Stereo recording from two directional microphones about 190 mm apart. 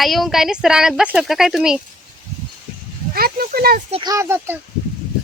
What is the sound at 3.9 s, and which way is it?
Speech, 25° right (ahead or behind).